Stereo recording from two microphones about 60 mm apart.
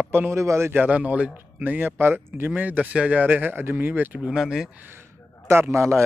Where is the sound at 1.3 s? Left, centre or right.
Right.